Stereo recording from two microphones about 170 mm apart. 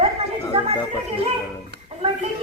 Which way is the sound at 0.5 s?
35° right (ahead or behind).